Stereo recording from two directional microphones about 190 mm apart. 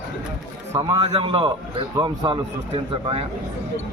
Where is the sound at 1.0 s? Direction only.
30° right (ahead or behind).